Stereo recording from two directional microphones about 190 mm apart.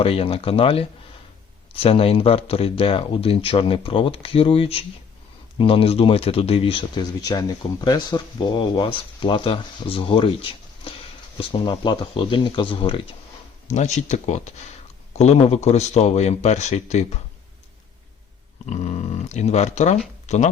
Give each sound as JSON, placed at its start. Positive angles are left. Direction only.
{"t": 0.0, "sound": "speech", "side_deg": 30}
{"t": 13.7, "sound": "speech", "side_deg": 40}
{"t": 18.6, "sound": "speech", "side_deg": 40}